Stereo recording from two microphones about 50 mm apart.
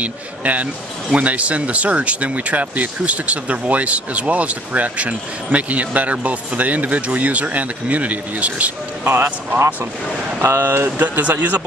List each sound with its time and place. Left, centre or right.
0.0 s speech: right
9.0 s speech: right
10.4 s speech: right
10.7 s speech: right